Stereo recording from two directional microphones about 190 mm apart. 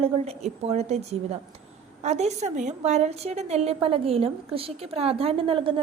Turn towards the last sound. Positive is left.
turn(degrees=-30)  # may be behind; listen again after turning